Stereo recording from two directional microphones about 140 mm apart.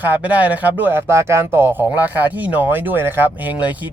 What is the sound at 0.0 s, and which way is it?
A man's voice, 10° right (ahead or behind).